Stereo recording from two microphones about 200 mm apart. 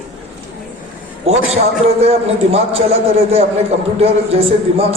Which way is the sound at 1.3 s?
30° right (ahead or behind).